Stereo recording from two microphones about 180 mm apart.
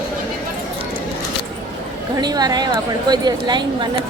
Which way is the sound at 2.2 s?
20° right (ahead or behind).